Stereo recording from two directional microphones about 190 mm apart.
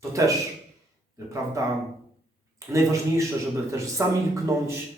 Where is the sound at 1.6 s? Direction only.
15° right (ahead or behind).